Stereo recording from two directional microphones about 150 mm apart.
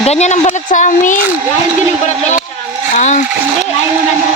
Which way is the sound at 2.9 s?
55° left (ahead or behind).